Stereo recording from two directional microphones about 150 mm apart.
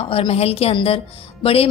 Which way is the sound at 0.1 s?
40° left (ahead or behind).